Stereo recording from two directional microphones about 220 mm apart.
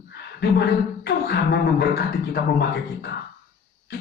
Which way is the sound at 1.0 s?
50° left (ahead or behind).